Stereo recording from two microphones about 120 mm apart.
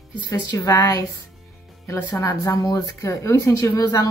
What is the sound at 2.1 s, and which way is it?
Speech, 30° left (ahead or behind).